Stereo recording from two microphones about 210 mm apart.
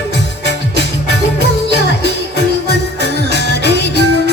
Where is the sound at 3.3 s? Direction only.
55° left (ahead or behind).